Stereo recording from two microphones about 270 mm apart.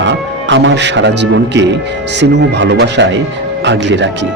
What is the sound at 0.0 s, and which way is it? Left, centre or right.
Speech, right.